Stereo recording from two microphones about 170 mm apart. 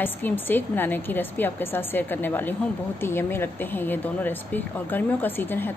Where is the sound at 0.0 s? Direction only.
10° left (ahead or behind).